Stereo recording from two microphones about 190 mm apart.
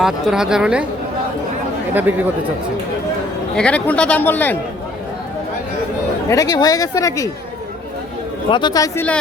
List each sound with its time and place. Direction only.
0.0 s speech: 5° right (ahead or behind)
1.9 s speech: 10° right (ahead or behind)
3.5 s speech: 5° left (ahead or behind)
6.3 s speech: 20° left (ahead or behind)
8.4 s speech: 25° left (ahead or behind)